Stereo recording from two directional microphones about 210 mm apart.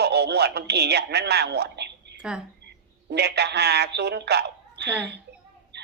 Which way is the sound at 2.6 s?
50° right (ahead or behind).